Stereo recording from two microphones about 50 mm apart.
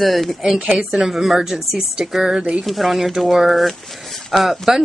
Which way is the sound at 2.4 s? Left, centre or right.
Centre.